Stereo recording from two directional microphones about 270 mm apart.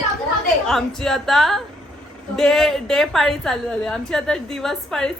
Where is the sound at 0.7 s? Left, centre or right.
Centre.